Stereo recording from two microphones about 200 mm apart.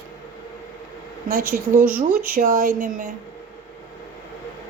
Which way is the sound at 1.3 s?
45° right (ahead or behind).